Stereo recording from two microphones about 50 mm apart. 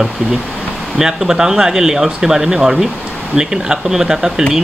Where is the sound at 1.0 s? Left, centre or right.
Centre.